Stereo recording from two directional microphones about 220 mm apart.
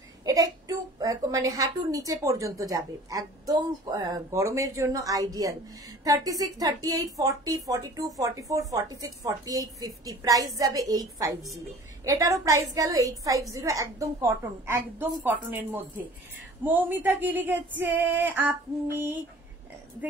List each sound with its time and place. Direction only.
0.2 s a woman's voice: 15° right (ahead or behind)